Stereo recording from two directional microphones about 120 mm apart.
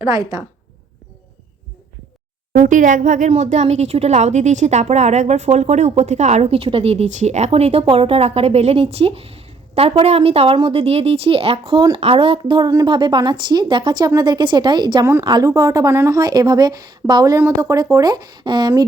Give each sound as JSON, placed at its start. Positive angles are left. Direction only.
{"t": 0.0, "sound": "speech", "side_deg": -30}
{"t": 2.6, "sound": "a woman's voice", "side_deg": -90}